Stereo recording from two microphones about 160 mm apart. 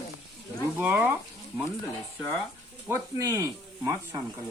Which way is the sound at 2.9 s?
15° right (ahead or behind).